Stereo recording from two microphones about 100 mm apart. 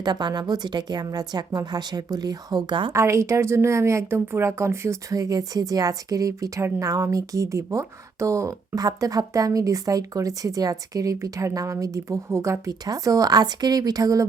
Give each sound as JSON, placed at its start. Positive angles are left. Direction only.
{"t": 0.0, "sound": "a woman's voice", "side_deg": -45}
{"t": 2.9, "sound": "speech", "side_deg": -30}